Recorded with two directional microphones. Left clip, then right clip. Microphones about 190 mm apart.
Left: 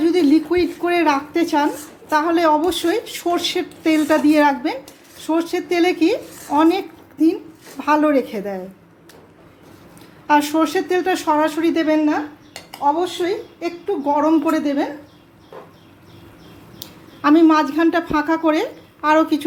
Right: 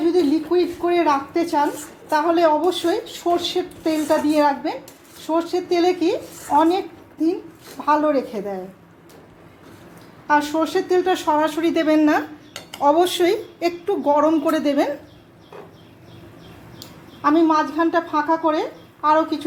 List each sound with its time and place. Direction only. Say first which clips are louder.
0.0 s a woman's voice: left 3 dB; 25° left (ahead or behind)
10.2 s speech: left 3 dB; 25° left (ahead or behind); by 11.9 s centre (ahead or behind)
11.9 s speech: right 1 dB; 20° right (ahead or behind)
12.8 s speech: right 2 dB; 35° right (ahead or behind)
14.0 s a woman's voice: even; centre (ahead or behind)
17.2 s speech: left 3 dB; 30° left (ahead or behind)